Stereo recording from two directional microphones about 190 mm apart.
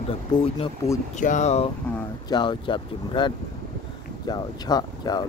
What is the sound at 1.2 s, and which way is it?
Speech, 40° left (ahead or behind).